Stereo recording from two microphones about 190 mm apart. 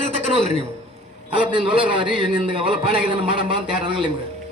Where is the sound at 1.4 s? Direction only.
25° right (ahead or behind).